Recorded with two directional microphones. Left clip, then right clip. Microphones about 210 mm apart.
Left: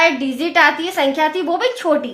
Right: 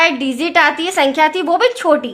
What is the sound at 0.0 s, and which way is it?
A woman's voice, 35° right (ahead or behind).